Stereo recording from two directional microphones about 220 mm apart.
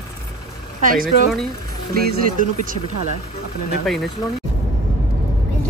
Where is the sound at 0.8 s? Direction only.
40° right (ahead or behind).